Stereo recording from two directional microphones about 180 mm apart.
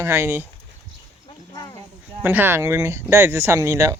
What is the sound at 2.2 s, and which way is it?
Speech, 10° right (ahead or behind).